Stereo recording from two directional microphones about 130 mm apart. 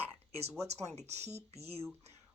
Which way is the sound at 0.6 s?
55° right (ahead or behind).